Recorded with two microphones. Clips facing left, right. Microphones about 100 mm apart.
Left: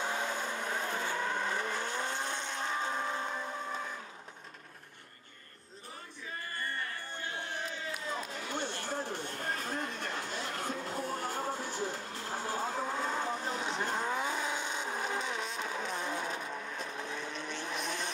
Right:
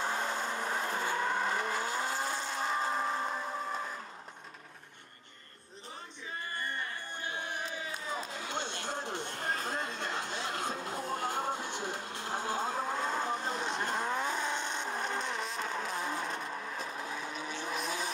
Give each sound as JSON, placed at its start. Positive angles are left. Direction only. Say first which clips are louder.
{"t": 0.0, "sound": "vehicle", "louder": "right 1 dB", "side_deg": 0}
{"t": 6.5, "sound": "music", "louder": "even", "side_deg": -20}
{"t": 8.4, "sound": "a sound", "louder": "even", "side_deg": -20}
{"t": 12.8, "sound": "vehicle", "louder": "right 1 dB", "side_deg": 0}